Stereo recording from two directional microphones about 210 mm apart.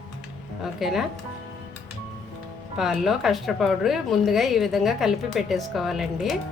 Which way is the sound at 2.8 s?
Centre (ahead or behind).